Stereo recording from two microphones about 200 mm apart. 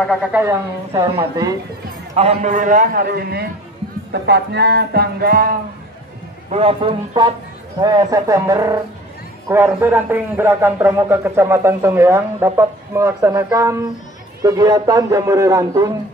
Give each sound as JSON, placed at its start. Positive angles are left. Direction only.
{"t": 0.0, "sound": "a man's voice", "side_deg": 0}
{"t": 2.1, "sound": "a man's voice", "side_deg": -35}
{"t": 4.1, "sound": "music", "side_deg": -55}
{"t": 6.5, "sound": "a man's voice", "side_deg": -30}